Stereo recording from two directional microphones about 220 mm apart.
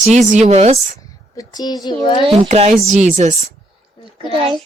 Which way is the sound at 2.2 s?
25° right (ahead or behind).